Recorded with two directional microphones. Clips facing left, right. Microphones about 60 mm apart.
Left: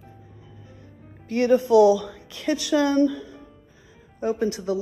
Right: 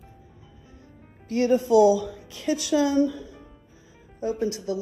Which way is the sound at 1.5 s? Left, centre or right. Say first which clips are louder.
Left 2 dB; left.